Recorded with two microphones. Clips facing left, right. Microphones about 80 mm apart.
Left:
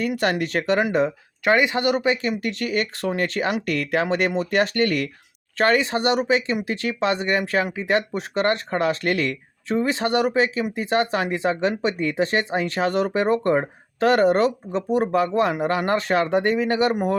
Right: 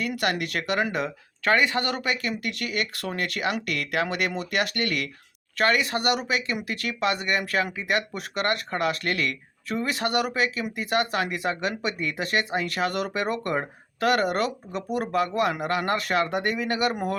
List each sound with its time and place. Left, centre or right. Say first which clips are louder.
0.2 s speech: left 5 dB; left